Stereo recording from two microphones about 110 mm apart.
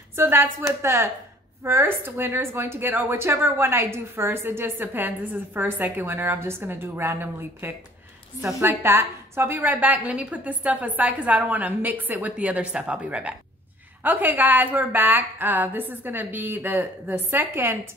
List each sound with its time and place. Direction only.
0.1 s a woman's voice: 20° right (ahead or behind)